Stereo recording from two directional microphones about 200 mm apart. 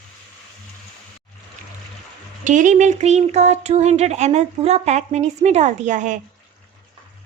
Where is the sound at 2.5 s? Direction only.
40° right (ahead or behind).